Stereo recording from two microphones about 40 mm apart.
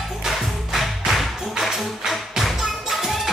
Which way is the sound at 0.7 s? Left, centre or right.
Centre.